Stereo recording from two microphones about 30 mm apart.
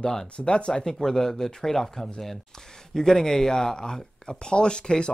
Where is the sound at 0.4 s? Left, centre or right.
Left.